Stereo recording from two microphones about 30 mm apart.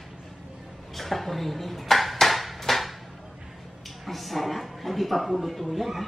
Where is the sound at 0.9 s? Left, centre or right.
Centre.